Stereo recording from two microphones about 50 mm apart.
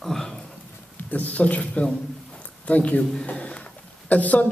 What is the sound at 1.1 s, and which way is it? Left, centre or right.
Speech, left.